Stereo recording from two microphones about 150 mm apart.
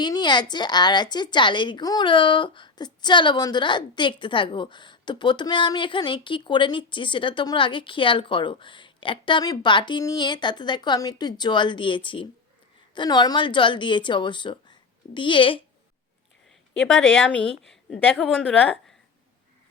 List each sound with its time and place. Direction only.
0.0 s a woman's voice: 30° left (ahead or behind)
17.1 s a woman's voice: 10° left (ahead or behind)